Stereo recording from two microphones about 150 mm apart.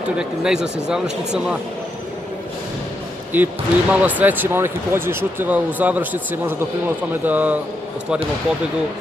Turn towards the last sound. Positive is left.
turn(degrees=-10)  # may be behind; listen again after turning